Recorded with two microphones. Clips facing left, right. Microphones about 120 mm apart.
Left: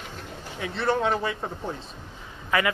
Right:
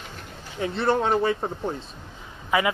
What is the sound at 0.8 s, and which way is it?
Speech, 35° right (ahead or behind).